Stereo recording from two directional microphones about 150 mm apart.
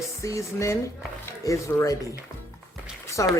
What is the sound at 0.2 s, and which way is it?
Speech, 20° left (ahead or behind).